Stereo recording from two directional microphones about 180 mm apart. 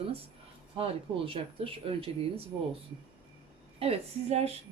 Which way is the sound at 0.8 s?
30° right (ahead or behind).